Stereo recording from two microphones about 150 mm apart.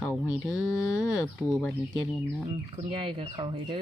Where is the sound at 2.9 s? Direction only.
35° right (ahead or behind).